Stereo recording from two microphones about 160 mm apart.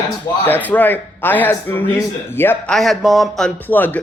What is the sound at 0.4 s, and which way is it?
Speech, 10° left (ahead or behind).